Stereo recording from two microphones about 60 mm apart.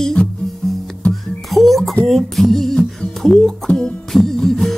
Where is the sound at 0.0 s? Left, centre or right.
Centre.